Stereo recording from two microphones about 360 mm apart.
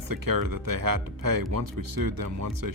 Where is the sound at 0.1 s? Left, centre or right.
Right.